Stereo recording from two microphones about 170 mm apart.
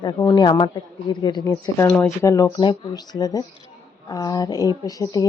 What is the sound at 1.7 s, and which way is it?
Speech, 15° left (ahead or behind).